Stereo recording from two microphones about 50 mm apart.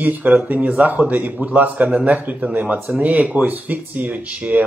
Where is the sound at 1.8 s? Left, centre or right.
Centre.